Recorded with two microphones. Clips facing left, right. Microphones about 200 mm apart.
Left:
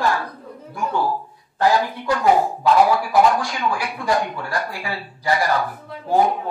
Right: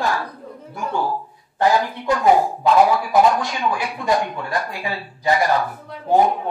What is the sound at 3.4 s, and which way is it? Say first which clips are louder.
Speech: right 1 dB; 20° right (ahead or behind).